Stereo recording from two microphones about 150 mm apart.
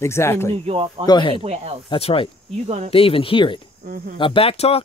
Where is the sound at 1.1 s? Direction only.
30° left (ahead or behind).